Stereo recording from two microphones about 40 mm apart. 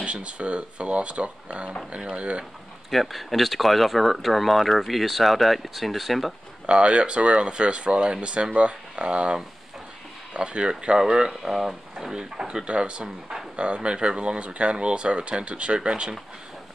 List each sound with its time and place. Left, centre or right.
0.0 s speech: right
2.9 s speech: centre
6.6 s speech: right
12.5 s speech: right